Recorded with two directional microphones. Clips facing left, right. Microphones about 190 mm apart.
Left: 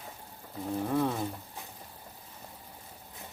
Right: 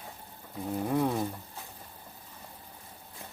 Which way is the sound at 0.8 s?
15° right (ahead or behind).